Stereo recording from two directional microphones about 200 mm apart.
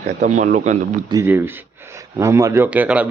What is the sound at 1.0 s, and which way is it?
Speech, 15° right (ahead or behind).